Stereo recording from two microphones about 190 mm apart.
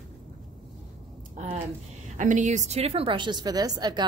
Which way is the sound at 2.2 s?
40° right (ahead or behind).